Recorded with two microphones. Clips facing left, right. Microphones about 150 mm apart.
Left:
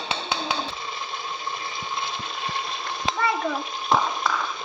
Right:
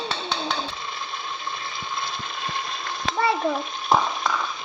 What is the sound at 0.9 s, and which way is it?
Pump, 15° left (ahead or behind).